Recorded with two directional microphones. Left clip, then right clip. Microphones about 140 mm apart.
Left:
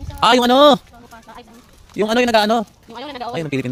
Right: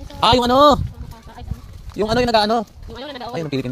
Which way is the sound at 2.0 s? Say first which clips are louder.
Left 1 dB; 40° left (ahead or behind).